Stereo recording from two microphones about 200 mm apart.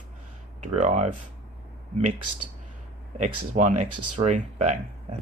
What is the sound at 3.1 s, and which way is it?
Speech, 35° right (ahead or behind).